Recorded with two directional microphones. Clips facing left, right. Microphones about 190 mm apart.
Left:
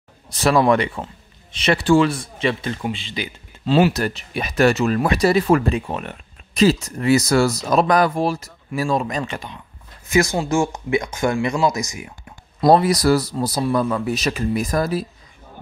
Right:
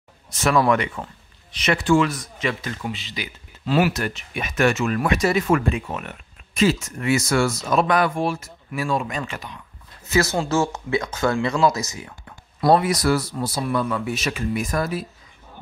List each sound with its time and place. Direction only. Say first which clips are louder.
0.3 s speech: left 3 dB; 35° left (ahead or behind)
10.0 s speech: left 2 dB; 15° left (ahead or behind)
12.6 s speech: left 3 dB; 35° left (ahead or behind)